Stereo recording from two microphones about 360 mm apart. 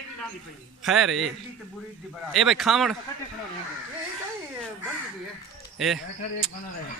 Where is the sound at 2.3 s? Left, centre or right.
Centre.